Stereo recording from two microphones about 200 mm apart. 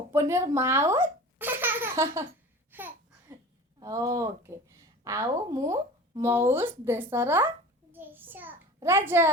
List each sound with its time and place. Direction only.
0.1 s speech: 15° right (ahead or behind)
2.7 s babbling: 10° right (ahead or behind)
3.8 s a woman's voice: 15° right (ahead or behind)